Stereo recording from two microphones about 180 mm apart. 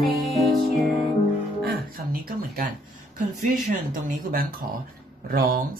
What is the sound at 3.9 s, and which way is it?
Speech, 50° right (ahead or behind).